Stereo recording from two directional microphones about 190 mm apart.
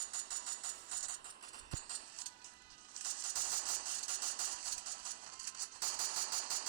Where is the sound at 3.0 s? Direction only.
45° right (ahead or behind).